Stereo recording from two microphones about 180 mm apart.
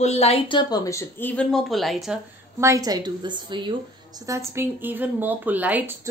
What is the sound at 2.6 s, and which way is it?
A woman's voice, 15° right (ahead or behind).